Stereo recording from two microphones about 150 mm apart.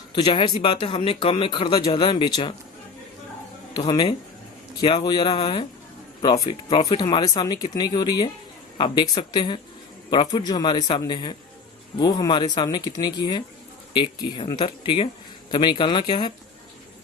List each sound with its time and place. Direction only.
0.3 s speech: 35° left (ahead or behind)
3.8 s speech: 30° left (ahead or behind)